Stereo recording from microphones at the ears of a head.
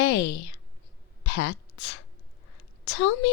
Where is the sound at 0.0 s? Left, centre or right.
Left.